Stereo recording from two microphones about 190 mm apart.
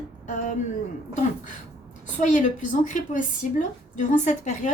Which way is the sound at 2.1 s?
40° left (ahead or behind).